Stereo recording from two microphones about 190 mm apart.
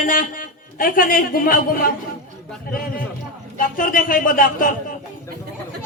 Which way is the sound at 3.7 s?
45° left (ahead or behind).